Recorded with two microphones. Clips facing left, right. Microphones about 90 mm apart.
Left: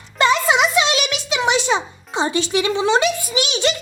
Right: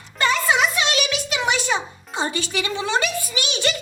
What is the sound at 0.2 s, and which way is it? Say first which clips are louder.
Music: left 4 dB; 20° left (ahead or behind).